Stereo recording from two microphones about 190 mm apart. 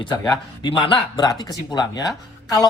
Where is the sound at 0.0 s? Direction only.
25° left (ahead or behind).